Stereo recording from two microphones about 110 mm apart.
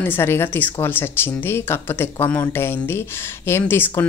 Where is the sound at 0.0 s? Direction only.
20° left (ahead or behind).